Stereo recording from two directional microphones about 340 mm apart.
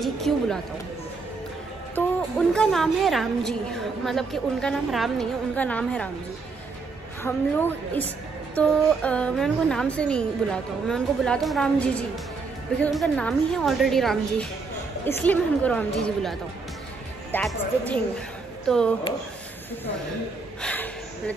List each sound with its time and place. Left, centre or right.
0.0 s a woman's voice: centre
2.0 s a woman's voice: centre
7.2 s a woman's voice: centre
20.6 s gasp: centre